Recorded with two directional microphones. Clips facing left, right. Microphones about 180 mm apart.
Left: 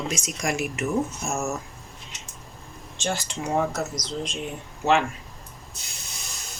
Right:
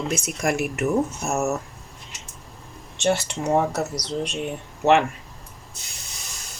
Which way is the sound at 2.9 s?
65° right (ahead or behind).